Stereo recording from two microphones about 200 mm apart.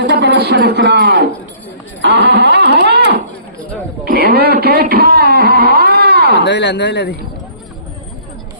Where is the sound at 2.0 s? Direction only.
60° right (ahead or behind).